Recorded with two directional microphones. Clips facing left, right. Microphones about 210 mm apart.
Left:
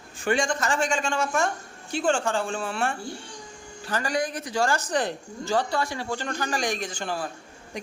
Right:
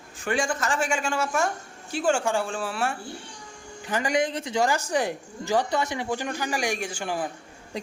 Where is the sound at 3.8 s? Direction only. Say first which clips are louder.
Right 2 dB; 15° right (ahead or behind).